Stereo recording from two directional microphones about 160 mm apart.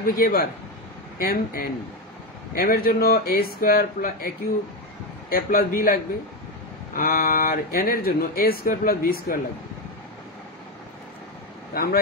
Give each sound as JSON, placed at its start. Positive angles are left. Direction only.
{"t": 0.0, "sound": "a man's voice", "side_deg": 65}
{"t": 5.3, "sound": "speech", "side_deg": 65}
{"t": 11.7, "sound": "speech", "side_deg": 65}